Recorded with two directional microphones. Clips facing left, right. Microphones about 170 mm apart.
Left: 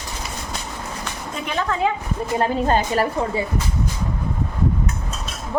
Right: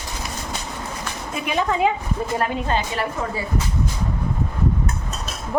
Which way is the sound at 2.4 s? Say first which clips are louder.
Left 7 dB; 40° left (ahead or behind).